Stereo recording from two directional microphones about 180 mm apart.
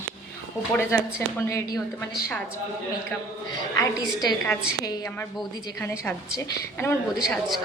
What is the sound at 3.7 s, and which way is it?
A woman's voice, 20° left (ahead or behind).